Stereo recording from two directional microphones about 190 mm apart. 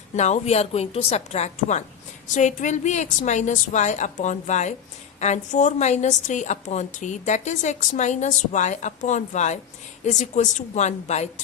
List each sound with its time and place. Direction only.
0.2 s a woman's voice: 35° left (ahead or behind)